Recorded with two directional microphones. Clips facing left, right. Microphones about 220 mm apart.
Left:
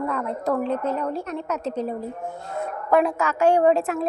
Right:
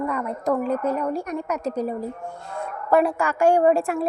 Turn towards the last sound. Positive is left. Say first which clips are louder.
# even
turn(degrees=-10)  # may be behind; listen again after turning